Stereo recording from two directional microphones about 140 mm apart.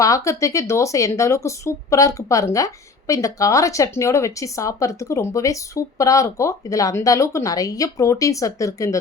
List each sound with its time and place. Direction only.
0.0 s speech: 20° left (ahead or behind)